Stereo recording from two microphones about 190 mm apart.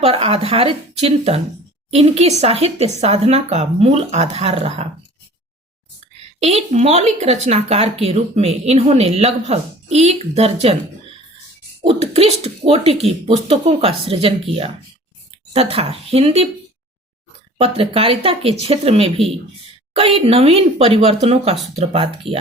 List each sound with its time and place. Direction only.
0.0 s speech: 30° right (ahead or behind)
6.4 s speech: 35° right (ahead or behind)
11.9 s speech: 30° right (ahead or behind)
17.6 s speech: 30° right (ahead or behind)